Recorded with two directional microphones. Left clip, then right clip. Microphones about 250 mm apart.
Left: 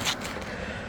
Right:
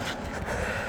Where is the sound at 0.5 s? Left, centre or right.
Right.